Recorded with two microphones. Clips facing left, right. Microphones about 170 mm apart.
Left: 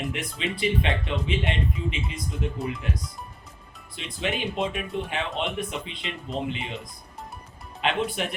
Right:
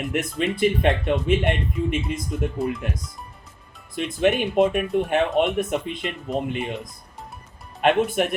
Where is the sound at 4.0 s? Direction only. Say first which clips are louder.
Right 9 dB; 50° right (ahead or behind).